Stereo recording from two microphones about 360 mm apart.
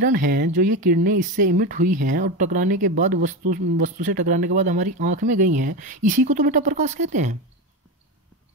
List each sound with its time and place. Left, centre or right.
0.0 s speech: right